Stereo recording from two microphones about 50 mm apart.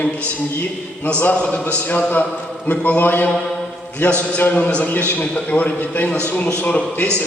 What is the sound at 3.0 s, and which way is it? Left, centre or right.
A man's voice, left.